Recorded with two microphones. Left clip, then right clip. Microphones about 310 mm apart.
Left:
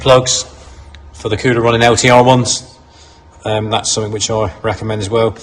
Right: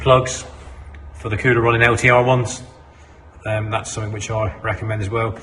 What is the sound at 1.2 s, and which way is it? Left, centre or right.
Speech, centre.